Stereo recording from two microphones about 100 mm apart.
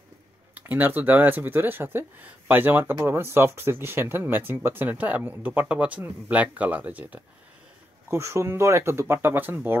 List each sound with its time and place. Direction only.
0.6 s speech: 20° right (ahead or behind)
8.1 s speech: 30° right (ahead or behind)